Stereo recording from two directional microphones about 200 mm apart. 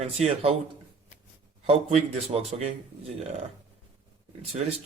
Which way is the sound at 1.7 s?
30° right (ahead or behind).